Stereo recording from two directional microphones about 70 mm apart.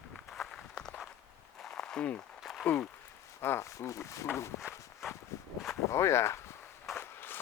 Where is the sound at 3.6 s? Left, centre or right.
Left.